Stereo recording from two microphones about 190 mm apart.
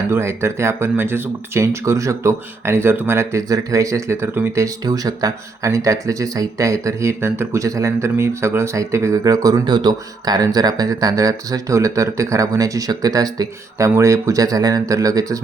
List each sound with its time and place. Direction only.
0.1 s speech: 15° right (ahead or behind)